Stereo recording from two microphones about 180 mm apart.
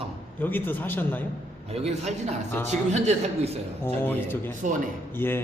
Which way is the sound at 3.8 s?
10° left (ahead or behind).